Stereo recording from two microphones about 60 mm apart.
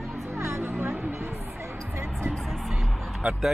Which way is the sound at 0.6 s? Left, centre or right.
Right.